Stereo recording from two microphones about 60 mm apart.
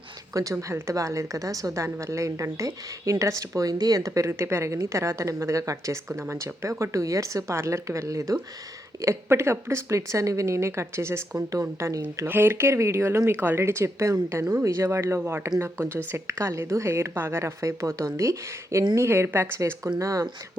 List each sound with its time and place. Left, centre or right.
0.3 s a woman's voice: right
4.3 s a woman's voice: right
6.1 s a woman's voice: right
9.0 s speech: right
11.8 s a woman's voice: right
12.2 s speech: right
13.3 s speech: right
13.6 s a woman's voice: right
15.2 s speech: right
15.4 s a woman's voice: right
19.6 s a woman's voice: right